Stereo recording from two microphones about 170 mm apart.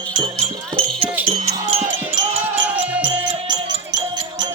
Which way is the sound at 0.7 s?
35° right (ahead or behind).